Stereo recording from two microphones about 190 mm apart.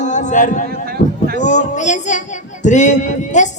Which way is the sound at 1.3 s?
40° left (ahead or behind).